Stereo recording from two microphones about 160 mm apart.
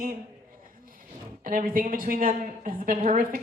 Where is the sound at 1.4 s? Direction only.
60° right (ahead or behind).